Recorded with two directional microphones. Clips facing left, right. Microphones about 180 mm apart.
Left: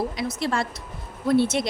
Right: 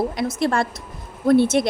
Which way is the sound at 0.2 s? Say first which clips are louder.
Right 5 dB; 50° right (ahead or behind).